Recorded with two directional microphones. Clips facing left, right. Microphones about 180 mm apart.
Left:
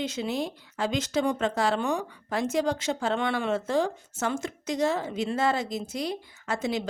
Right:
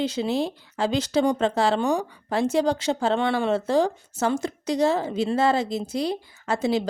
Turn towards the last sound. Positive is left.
turn(degrees=-30)  # may be behind; listen again after turning